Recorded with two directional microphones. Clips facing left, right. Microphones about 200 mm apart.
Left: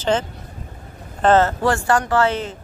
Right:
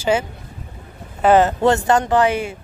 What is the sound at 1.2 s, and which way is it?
Speech, 15° right (ahead or behind).